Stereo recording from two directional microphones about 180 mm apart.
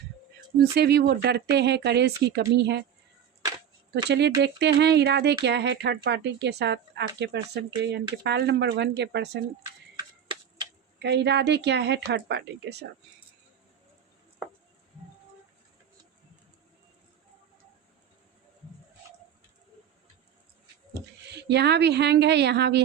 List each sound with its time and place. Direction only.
0.6 s speech: 65° right (ahead or behind)
4.1 s speech: 70° right (ahead or behind)
11.0 s speech: 70° right (ahead or behind)
21.3 s speech: 70° right (ahead or behind)